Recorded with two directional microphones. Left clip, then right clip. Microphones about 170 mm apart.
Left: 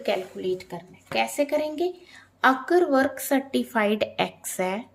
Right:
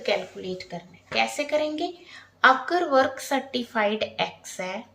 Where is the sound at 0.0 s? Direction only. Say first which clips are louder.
Even; 45° left (ahead or behind).